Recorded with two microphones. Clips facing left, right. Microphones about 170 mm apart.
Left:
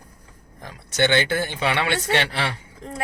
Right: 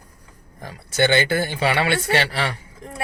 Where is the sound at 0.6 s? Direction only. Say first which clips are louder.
Right 2 dB; 5° right (ahead or behind).